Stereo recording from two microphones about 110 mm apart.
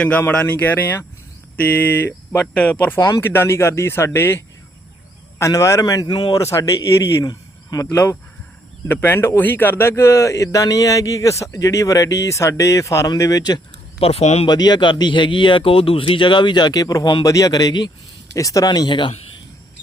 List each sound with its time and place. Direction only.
0.0 s speech: 15° left (ahead or behind)
7.3 s cricket: 35° left (ahead or behind)
8.9 s speech: 20° left (ahead or behind)
14.0 s speech: 70° left (ahead or behind)
14.4 s speech: 40° left (ahead or behind)